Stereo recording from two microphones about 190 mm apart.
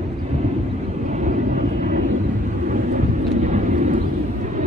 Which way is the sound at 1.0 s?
40° right (ahead or behind).